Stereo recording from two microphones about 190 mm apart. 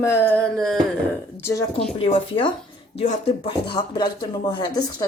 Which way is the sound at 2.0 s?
30° left (ahead or behind).